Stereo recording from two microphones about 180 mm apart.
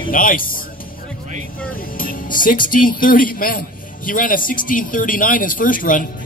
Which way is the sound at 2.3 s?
50° left (ahead or behind).